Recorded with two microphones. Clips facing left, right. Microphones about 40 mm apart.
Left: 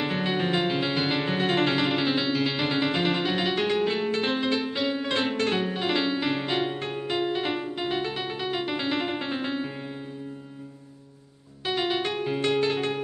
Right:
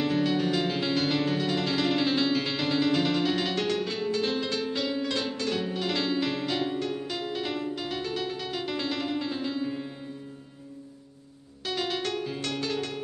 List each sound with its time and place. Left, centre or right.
0.0 s music: left
1.9 s music: centre
2.6 s music: left
5.1 s music: left
11.6 s music: left